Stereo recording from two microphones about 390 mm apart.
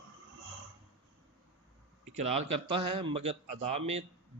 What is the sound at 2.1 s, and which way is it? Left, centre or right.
Speech, centre.